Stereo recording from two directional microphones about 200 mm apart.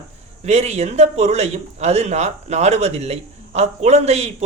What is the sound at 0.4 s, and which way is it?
A man's voice, 35° right (ahead or behind).